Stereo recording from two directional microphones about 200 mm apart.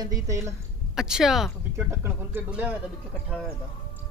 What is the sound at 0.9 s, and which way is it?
Speech, centre (ahead or behind).